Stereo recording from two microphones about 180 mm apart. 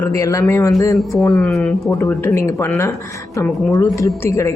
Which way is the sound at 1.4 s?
5° left (ahead or behind).